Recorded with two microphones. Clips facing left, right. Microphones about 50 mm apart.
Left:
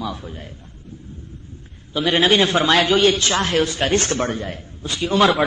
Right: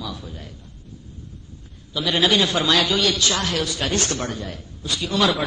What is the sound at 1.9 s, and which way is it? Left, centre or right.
A man's voice, left.